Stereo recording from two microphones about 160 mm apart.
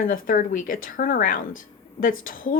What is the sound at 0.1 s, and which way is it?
Speech, 55° left (ahead or behind).